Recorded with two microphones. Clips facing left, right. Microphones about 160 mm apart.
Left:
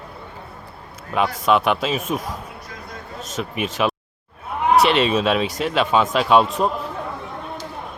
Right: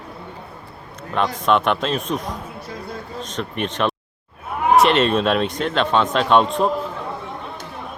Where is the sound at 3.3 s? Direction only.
5° left (ahead or behind).